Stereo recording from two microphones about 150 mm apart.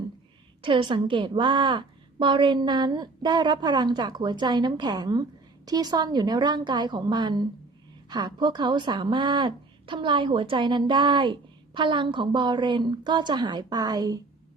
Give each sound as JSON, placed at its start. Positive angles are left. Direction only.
{"t": 0.6, "sound": "a woman's voice", "side_deg": -35}